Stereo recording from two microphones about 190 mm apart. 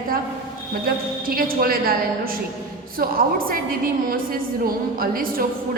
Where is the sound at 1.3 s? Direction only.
50° right (ahead or behind).